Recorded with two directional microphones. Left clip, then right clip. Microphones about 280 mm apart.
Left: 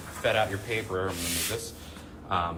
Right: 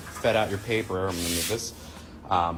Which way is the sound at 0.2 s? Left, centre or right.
Centre.